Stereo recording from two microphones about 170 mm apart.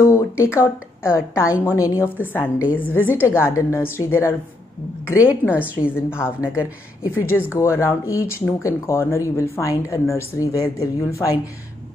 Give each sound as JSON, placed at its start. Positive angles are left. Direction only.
{"t": 0.0, "sound": "speech", "side_deg": 15}
{"t": 3.1, "sound": "speech", "side_deg": -10}
{"t": 3.3, "sound": "speech", "side_deg": 15}
{"t": 5.4, "sound": "speech", "side_deg": 10}
{"t": 6.4, "sound": "speech", "side_deg": -10}
{"t": 7.0, "sound": "speech", "side_deg": 15}